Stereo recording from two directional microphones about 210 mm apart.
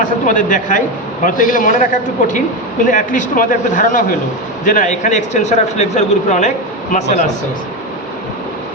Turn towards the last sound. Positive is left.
turn(degrees=35)  # may be behind; listen again after turning